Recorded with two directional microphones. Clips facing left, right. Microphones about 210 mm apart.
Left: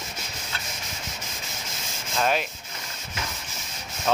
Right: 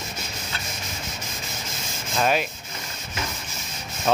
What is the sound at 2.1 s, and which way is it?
Rub, 10° right (ahead or behind).